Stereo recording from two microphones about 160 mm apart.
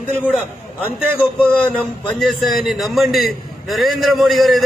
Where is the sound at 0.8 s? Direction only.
10° left (ahead or behind).